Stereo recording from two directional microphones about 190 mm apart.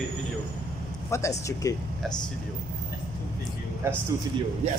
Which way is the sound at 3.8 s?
15° right (ahead or behind).